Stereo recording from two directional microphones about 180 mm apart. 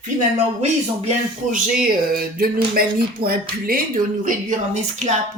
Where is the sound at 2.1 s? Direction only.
55° right (ahead or behind).